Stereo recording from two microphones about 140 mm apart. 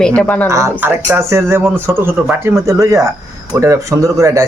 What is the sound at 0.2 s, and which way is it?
Speech, 10° left (ahead or behind).